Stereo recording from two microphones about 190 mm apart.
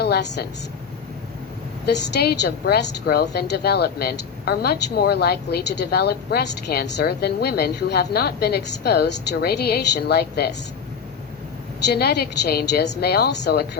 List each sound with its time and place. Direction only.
0.0 s a woman's voice: 60° left (ahead or behind)
1.9 s a woman's voice: 65° left (ahead or behind)
11.9 s a woman's voice: 60° left (ahead or behind)